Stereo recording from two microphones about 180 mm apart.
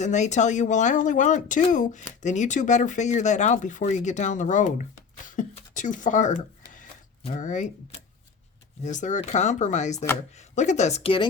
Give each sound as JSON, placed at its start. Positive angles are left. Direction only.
{"t": 0.0, "sound": "speech", "side_deg": 40}
{"t": 7.3, "sound": "speech", "side_deg": 45}